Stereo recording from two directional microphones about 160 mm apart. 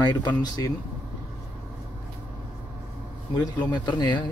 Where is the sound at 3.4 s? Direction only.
30° left (ahead or behind).